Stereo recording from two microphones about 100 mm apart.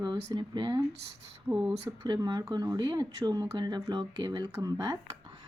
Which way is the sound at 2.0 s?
45° right (ahead or behind).